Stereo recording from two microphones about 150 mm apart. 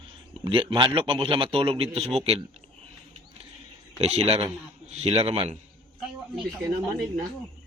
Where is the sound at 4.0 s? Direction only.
45° right (ahead or behind).